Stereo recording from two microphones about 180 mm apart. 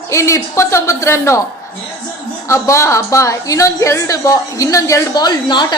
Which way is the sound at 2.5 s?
15° left (ahead or behind).